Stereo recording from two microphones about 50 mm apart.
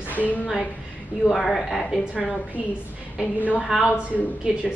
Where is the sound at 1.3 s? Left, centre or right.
Centre.